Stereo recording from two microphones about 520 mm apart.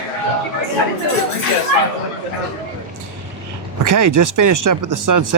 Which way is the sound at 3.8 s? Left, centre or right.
Right.